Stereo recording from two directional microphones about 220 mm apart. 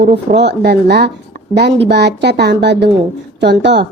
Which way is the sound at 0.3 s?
50° right (ahead or behind).